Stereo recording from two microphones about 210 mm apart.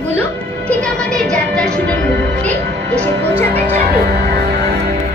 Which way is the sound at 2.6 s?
55° right (ahead or behind).